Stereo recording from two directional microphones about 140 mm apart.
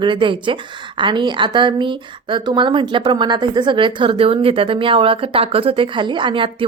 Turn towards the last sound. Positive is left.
turn(degrees=-40)  # may be behind; listen again after turning